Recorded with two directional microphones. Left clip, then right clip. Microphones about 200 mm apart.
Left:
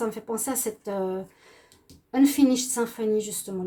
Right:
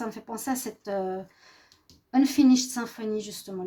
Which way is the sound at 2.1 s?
45° right (ahead or behind).